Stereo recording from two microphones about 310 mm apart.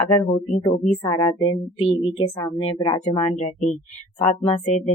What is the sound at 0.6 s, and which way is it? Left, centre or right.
Speech, centre.